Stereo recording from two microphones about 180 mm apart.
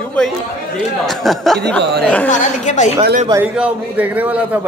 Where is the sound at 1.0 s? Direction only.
Centre (ahead or behind).